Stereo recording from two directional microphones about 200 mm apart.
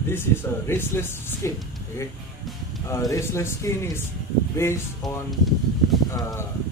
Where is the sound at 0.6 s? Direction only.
10° left (ahead or behind).